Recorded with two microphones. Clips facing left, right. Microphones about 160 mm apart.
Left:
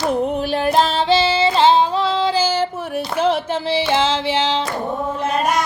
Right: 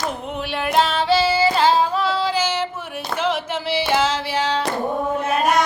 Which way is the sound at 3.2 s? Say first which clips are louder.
Left 4 dB; 30° left (ahead or behind).